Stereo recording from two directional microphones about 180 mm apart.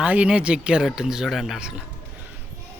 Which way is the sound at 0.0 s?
5° right (ahead or behind).